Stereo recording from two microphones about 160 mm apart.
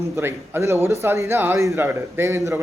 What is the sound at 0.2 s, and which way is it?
A man's voice, 15° right (ahead or behind).